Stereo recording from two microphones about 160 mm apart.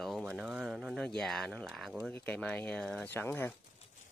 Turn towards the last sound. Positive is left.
turn(degrees=10)  # may be behind; listen again after turning